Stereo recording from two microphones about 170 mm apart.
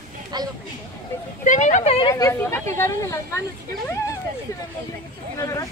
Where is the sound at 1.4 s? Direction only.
45° left (ahead or behind).